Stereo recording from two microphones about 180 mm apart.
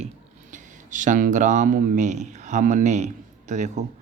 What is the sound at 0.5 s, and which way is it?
Speech, 45° right (ahead or behind).